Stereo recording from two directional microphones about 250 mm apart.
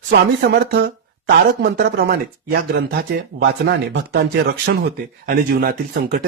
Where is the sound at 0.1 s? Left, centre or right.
Right.